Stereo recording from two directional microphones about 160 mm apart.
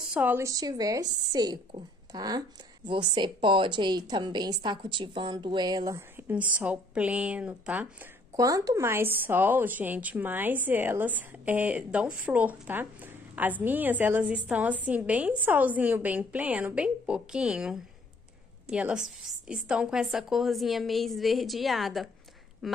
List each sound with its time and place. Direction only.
0.1 s a woman's voice: 10° right (ahead or behind)
8.4 s a woman's voice: 20° right (ahead or behind); by 22.8 s centre (ahead or behind)